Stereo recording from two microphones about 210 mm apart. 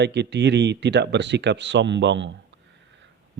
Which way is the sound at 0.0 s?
55° right (ahead or behind).